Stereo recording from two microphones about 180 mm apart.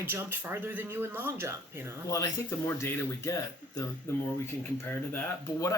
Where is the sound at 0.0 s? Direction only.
10° right (ahead or behind).